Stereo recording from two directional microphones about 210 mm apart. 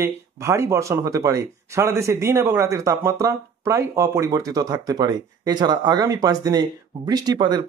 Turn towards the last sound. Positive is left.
turn(degrees=-20)  # may be behind; listen again after turning